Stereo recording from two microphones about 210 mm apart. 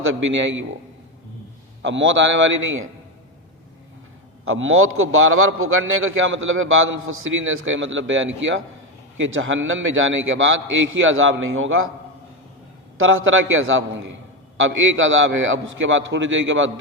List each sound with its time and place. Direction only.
0.0 s a man's voice: 65° right (ahead or behind)
1.8 s a man's voice: 60° right (ahead or behind)
4.4 s a man's voice: 75° right (ahead or behind)
13.0 s a man's voice: 75° right (ahead or behind)